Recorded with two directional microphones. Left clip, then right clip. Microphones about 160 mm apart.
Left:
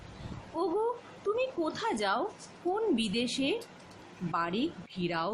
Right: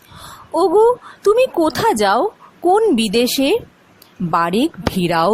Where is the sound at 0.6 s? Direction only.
55° right (ahead or behind).